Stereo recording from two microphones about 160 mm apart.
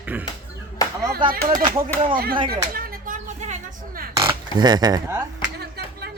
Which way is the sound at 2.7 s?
65° right (ahead or behind).